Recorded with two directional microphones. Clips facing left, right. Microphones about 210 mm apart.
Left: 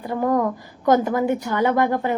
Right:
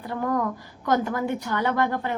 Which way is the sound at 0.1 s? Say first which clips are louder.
Left 5 dB; 20° left (ahead or behind).